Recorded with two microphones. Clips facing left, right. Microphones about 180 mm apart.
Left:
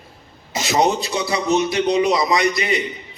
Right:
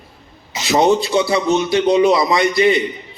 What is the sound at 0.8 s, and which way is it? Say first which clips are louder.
Speech: right 6 dB; 25° right (ahead or behind).